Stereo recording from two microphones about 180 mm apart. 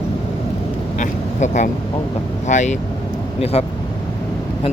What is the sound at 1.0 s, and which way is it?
Vehicle, 40° left (ahead or behind).